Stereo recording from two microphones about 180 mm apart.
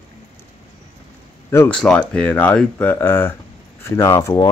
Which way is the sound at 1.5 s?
10° left (ahead or behind).